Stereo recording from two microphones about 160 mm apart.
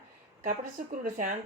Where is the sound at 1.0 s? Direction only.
60° right (ahead or behind).